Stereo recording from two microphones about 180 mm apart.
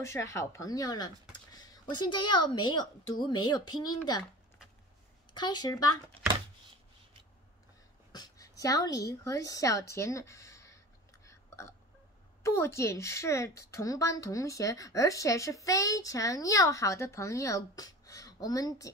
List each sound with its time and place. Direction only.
0.0 s a woman's voice: 15° left (ahead or behind)
5.3 s speech: 25° left (ahead or behind)
8.1 s a woman's voice: 20° left (ahead or behind)
11.2 s a sound: 15° left (ahead or behind)
12.4 s a woman's voice: 15° left (ahead or behind)